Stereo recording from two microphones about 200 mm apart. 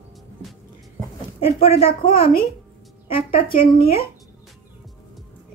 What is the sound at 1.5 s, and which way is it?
Speech, 30° left (ahead or behind).